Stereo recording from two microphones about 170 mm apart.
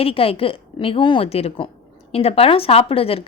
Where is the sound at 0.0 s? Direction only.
35° left (ahead or behind).